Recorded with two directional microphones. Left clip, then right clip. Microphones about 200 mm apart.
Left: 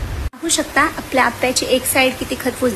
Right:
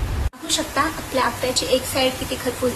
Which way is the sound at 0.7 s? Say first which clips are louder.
Left 7 dB; 30° left (ahead or behind).